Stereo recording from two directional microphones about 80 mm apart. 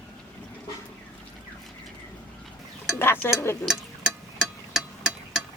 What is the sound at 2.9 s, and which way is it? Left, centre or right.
Stir, left.